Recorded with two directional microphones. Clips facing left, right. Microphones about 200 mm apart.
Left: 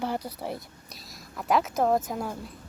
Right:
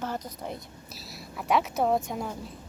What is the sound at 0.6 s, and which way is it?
A woman's voice, centre (ahead or behind).